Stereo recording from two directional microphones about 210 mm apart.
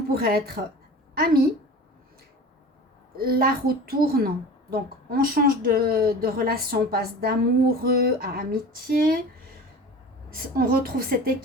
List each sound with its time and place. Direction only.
0.1 s a woman's voice: 45° right (ahead or behind)
3.2 s speech: 45° right (ahead or behind)
10.2 s speech: 45° right (ahead or behind)